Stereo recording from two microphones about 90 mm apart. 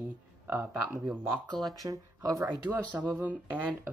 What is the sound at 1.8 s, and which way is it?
Speech, 40° right (ahead or behind).